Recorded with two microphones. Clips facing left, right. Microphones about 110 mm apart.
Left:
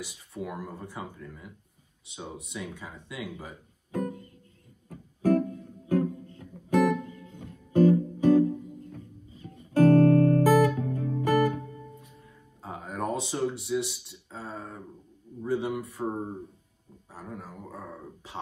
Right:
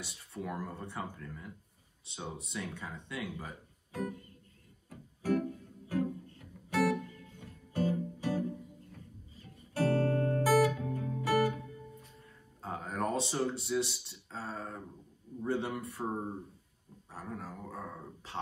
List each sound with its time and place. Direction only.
0.3 s speech: 5° left (ahead or behind)
2.5 s speech: 5° left (ahead or behind)
4.8 s music: 45° left (ahead or behind)
9.8 s music: 50° left (ahead or behind)
12.6 s speech: centre (ahead or behind)
17.1 s speech: centre (ahead or behind)